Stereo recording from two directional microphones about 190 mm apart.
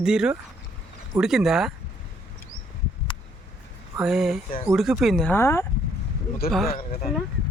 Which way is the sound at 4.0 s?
Centre (ahead or behind).